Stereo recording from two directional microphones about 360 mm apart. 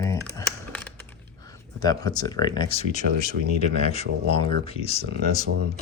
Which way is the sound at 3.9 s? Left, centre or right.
Centre.